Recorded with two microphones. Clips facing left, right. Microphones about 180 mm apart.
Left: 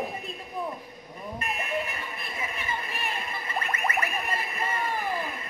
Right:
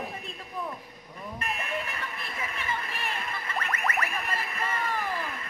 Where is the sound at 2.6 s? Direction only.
15° left (ahead or behind).